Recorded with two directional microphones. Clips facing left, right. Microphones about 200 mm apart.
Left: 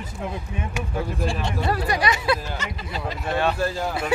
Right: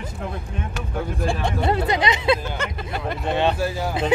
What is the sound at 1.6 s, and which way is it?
Speech, 20° right (ahead or behind).